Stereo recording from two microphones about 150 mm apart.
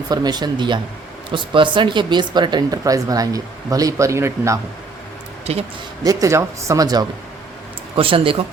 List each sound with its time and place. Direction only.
0.1 s speech: 25° right (ahead or behind)
5.5 s speech: 45° right (ahead or behind)
6.0 s speech: 25° right (ahead or behind)
7.9 s speech: 35° right (ahead or behind)